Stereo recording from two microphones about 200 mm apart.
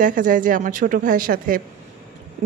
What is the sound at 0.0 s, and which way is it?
A woman's voice, 40° right (ahead or behind).